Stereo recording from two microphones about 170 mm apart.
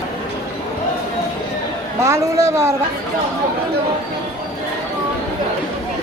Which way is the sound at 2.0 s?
15° right (ahead or behind).